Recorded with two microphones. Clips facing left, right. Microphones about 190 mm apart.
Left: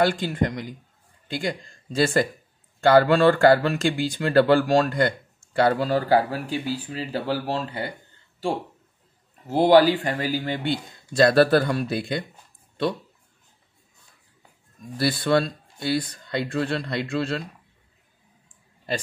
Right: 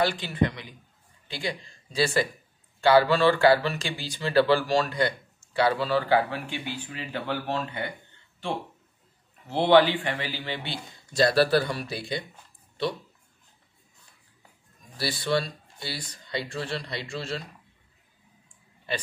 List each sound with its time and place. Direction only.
0.0 s speech: 45° left (ahead or behind)
9.5 s speech: 40° left (ahead or behind)
15.0 s speech: 55° left (ahead or behind)
18.9 s speech: 40° left (ahead or behind)